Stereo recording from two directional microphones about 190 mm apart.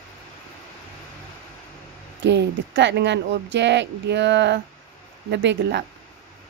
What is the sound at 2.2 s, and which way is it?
Speech, 65° right (ahead or behind).